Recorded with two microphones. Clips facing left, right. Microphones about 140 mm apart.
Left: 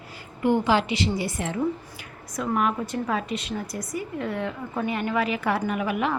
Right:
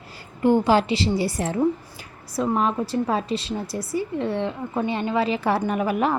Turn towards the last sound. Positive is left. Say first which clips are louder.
# right 3 dB
turn(degrees=-35)  # may be behind; listen again after turning